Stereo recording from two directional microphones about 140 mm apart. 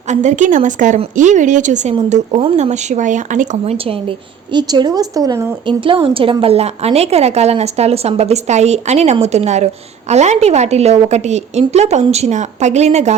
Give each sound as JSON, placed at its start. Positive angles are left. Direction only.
{"t": 0.1, "sound": "speech", "side_deg": -60}
{"t": 4.5, "sound": "a woman's voice", "side_deg": -30}
{"t": 5.6, "sound": "a woman's voice", "side_deg": -40}